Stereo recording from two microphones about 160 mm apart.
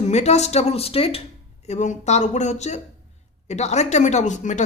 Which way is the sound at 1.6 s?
45° left (ahead or behind).